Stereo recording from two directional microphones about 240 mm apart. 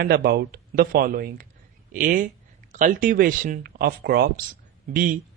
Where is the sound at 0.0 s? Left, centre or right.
Right.